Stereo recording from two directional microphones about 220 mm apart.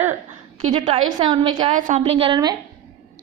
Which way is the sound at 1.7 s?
35° right (ahead or behind).